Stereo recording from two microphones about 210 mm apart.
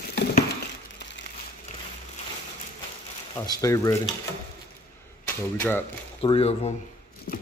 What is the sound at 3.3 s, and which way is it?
Speech, 15° left (ahead or behind).